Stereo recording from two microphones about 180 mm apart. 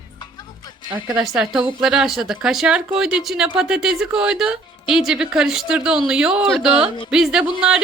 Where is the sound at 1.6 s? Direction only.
30° right (ahead or behind).